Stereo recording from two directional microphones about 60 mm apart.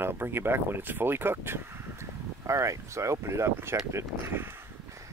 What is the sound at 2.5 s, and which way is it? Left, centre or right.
Speech, right.